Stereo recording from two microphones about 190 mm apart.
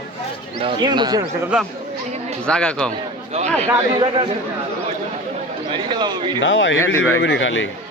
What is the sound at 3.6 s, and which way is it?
Speech, 25° right (ahead or behind).